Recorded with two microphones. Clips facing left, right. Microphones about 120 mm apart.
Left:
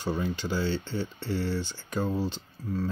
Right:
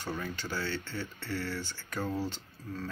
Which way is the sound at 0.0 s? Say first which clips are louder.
Left 7 dB; 15° left (ahead or behind).